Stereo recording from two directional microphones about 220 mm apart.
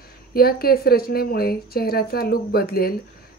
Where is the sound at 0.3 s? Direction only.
45° left (ahead or behind).